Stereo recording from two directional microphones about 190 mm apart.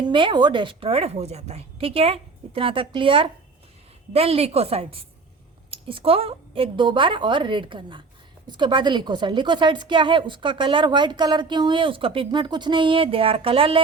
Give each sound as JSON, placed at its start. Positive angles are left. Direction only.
{"t": 0.0, "sound": "a woman's voice", "side_deg": -25}